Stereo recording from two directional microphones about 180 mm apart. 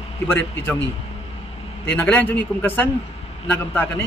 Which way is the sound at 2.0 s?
10° left (ahead or behind).